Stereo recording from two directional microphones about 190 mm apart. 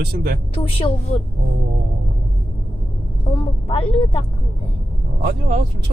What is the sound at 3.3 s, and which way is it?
Speech, 30° left (ahead or behind).